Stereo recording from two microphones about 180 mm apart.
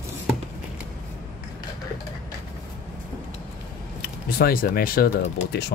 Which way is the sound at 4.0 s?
55° left (ahead or behind).